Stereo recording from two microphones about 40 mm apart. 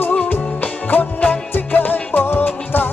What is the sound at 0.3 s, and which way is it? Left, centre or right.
Music, left.